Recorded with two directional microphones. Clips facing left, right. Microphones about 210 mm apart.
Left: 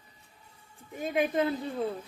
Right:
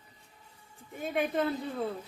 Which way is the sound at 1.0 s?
5° left (ahead or behind).